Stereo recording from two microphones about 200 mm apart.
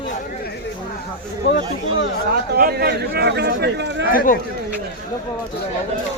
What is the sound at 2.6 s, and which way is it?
Speech, 50° right (ahead or behind).